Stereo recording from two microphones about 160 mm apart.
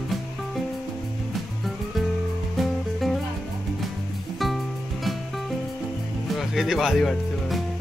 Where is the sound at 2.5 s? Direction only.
Centre (ahead or behind).